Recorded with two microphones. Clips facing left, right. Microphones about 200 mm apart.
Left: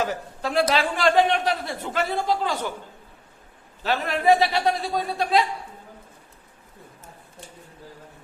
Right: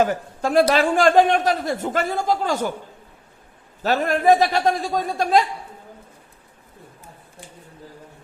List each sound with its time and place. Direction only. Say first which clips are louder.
0.0 s a woman's voice: right 6 dB; 50° right (ahead or behind)
3.8 s speech: right 3 dB; 45° right (ahead or behind)